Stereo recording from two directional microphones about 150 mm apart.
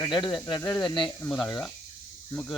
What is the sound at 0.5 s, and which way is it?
Speech, 20° left (ahead or behind).